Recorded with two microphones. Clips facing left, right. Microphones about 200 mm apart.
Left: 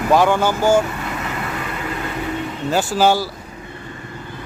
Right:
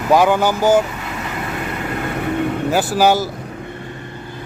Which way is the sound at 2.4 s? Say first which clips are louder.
Right 7 dB; 60° right (ahead or behind).